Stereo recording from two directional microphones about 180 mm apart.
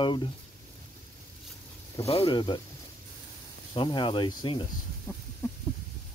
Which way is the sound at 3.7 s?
25° left (ahead or behind).